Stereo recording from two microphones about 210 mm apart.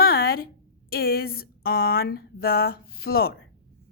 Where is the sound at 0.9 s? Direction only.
50° left (ahead or behind).